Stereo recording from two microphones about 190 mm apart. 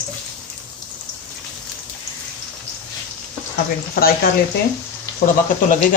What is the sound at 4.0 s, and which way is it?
Speech, 55° left (ahead or behind).